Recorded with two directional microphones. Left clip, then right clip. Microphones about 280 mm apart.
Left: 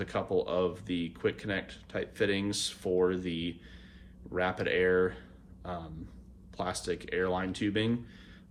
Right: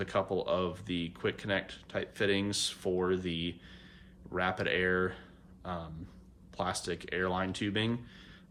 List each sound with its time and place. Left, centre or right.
0.0 s speech: centre